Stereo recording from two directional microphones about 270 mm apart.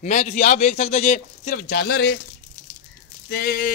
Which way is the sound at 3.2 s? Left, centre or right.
Left.